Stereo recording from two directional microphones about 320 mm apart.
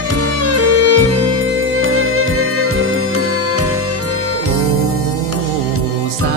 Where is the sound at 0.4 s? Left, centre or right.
Right.